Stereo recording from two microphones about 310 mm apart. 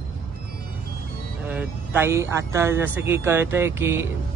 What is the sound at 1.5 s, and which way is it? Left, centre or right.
Speech, centre.